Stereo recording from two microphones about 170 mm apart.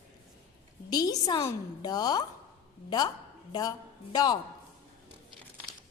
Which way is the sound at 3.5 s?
25° left (ahead or behind).